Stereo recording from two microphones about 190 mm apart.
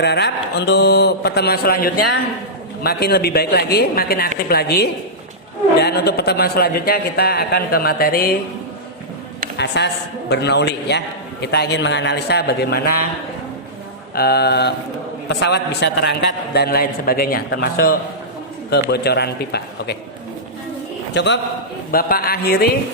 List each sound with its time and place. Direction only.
0.0 s a man's voice: 60° left (ahead or behind)
9.6 s a man's voice: 65° left (ahead or behind)
14.2 s a man's voice: 55° left (ahead or behind)
16.6 s a man's voice: 55° left (ahead or behind)
21.1 s a man's voice: 65° left (ahead or behind)
21.9 s a man's voice: 50° left (ahead or behind)